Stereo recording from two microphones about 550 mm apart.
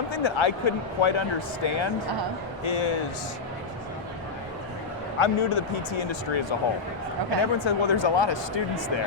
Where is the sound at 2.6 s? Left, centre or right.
Left.